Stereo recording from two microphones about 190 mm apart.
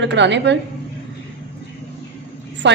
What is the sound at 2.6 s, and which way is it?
Vehicle, 65° right (ahead or behind).